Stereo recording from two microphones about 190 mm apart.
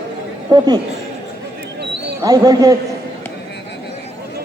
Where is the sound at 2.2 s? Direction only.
20° right (ahead or behind).